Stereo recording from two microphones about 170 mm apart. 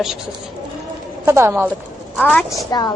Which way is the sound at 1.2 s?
15° right (ahead or behind).